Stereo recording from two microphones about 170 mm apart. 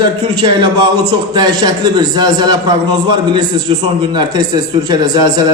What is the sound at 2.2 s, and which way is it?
Speech, 25° right (ahead or behind).